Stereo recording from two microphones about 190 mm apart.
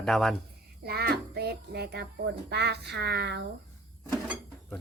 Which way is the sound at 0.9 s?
55° right (ahead or behind).